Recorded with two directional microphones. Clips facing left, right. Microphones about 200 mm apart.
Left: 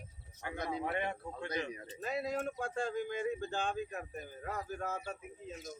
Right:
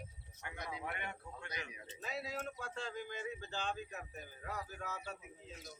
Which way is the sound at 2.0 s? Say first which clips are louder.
Left 7 dB; 50° left (ahead or behind).